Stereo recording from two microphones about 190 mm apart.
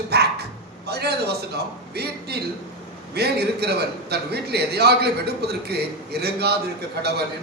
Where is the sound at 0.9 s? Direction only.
55° right (ahead or behind).